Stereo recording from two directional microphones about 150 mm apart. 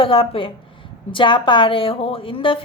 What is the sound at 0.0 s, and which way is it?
Speech, 35° left (ahead or behind).